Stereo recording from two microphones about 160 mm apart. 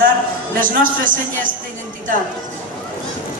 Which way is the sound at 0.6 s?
55° right (ahead or behind).